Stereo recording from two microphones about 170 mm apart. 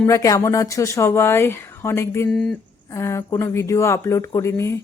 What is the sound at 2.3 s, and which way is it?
Speech, centre (ahead or behind).